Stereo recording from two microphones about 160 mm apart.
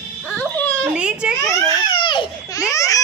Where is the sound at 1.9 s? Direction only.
30° left (ahead or behind).